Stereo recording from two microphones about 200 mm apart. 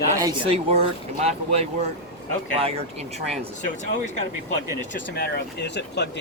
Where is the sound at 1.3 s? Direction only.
30° right (ahead or behind).